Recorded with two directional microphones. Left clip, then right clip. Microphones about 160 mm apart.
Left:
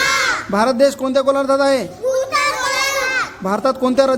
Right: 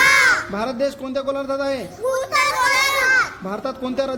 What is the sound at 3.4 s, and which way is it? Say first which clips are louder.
Speech: left 9 dB; 35° left (ahead or behind).